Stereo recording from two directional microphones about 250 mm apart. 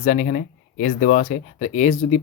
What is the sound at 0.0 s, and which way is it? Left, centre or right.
Speech, left.